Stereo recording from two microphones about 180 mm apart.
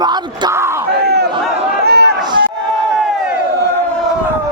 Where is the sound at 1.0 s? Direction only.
65° right (ahead or behind).